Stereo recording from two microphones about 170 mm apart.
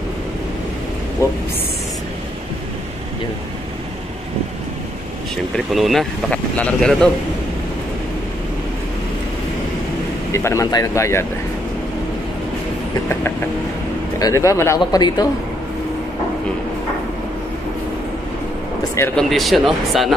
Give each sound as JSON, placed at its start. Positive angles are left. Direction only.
{"t": 5.7, "sound": "speech", "side_deg": 0}
{"t": 10.3, "sound": "speech", "side_deg": 15}
{"t": 13.1, "sound": "speech", "side_deg": 15}
{"t": 19.1, "sound": "speech", "side_deg": 0}